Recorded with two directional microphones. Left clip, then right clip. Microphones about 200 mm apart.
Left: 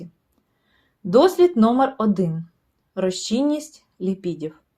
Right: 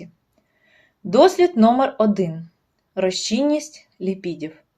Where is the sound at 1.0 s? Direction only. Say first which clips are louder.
Right 1 dB; 20° left (ahead or behind).